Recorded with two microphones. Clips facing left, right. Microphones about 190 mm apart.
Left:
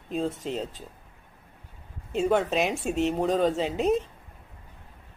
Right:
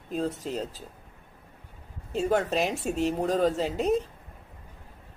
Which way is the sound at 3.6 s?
Centre (ahead or behind).